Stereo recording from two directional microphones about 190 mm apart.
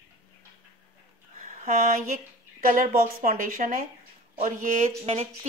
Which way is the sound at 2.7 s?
45° right (ahead or behind).